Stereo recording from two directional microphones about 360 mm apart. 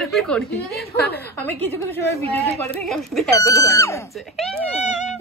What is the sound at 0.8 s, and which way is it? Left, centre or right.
Speech, left.